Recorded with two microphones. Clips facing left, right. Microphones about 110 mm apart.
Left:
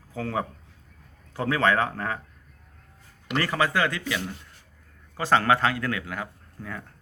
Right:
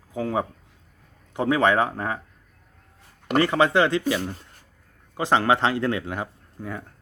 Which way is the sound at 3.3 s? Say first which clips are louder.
Right 6 dB; 20° right (ahead or behind).